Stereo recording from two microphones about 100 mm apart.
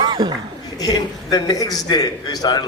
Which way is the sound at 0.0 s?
50° right (ahead or behind).